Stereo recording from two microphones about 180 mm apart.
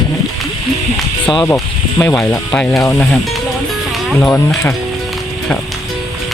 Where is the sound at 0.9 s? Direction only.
Centre (ahead or behind).